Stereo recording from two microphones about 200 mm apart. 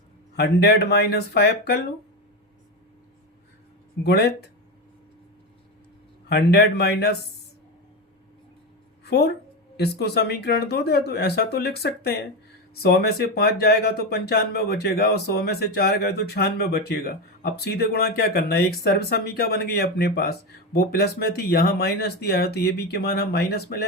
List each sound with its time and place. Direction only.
0.3 s speech: 55° left (ahead or behind)
4.0 s speech: 55° left (ahead or behind)
6.2 s speech: 55° left (ahead or behind)
9.0 s speech: 55° left (ahead or behind)